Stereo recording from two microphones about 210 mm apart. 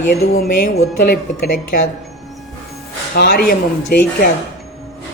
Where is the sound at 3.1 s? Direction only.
50° left (ahead or behind).